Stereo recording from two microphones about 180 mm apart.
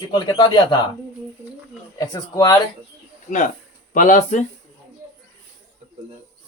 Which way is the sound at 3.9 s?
50° left (ahead or behind).